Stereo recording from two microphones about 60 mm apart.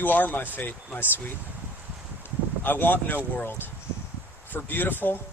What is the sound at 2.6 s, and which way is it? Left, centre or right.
Speech, left.